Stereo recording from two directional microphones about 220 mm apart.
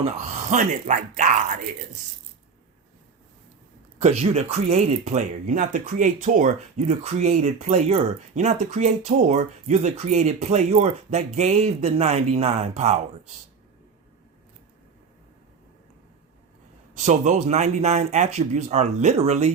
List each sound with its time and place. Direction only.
0.0 s speech: 30° right (ahead or behind)
4.0 s speech: 30° right (ahead or behind)
17.1 s speech: 30° right (ahead or behind)